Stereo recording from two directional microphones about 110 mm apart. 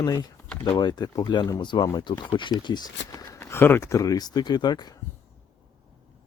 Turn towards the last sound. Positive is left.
turn(degrees=40)  # may be behind; listen again after turning